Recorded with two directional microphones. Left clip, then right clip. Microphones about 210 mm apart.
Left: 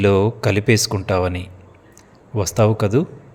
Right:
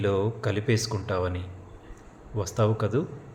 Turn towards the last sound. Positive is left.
turn(degrees=35)  # may be behind; listen again after turning